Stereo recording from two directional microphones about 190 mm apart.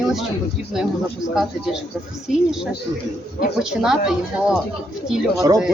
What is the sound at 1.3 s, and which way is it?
Speech, centre (ahead or behind).